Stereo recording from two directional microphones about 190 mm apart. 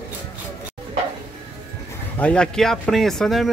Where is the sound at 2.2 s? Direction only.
5° left (ahead or behind).